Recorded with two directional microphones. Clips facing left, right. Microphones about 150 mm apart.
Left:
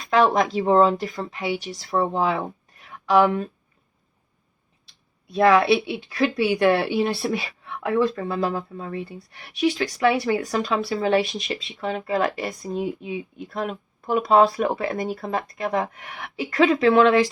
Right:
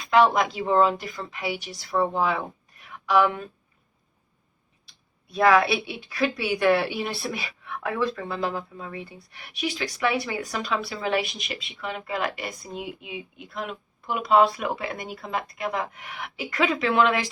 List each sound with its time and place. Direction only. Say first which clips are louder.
0.1 s speech: left 1 dB; 35° left (ahead or behind)
5.3 s speech: left 3 dB; 25° left (ahead or behind)